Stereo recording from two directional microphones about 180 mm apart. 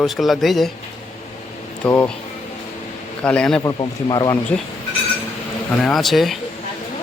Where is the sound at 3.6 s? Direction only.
20° left (ahead or behind).